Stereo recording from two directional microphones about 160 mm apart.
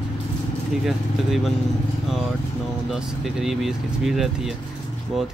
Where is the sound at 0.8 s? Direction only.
Centre (ahead or behind).